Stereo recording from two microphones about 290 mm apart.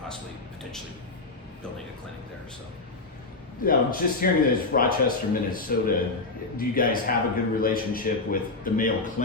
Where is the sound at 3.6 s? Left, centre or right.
Left.